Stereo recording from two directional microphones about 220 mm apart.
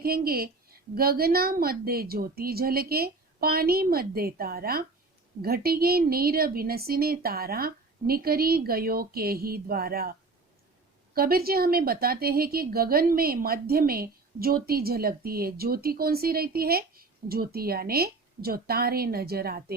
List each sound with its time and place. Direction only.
0.0 s a woman's voice: 45° right (ahead or behind)